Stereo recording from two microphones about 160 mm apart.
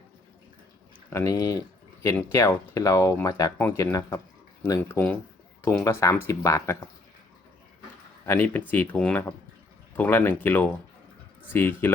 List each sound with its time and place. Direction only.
1.1 s speech: 20° left (ahead or behind)
8.3 s speech: 15° left (ahead or behind)